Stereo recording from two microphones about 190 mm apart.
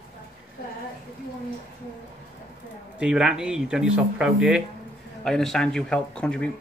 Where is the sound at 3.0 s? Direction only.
5° right (ahead or behind).